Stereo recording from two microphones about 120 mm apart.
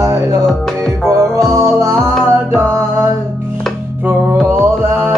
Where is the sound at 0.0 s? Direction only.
25° right (ahead or behind).